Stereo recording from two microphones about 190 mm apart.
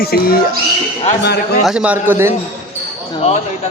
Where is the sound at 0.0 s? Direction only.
55° left (ahead or behind).